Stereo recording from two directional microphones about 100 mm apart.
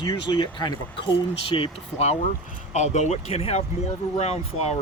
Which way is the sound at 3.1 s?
90° left.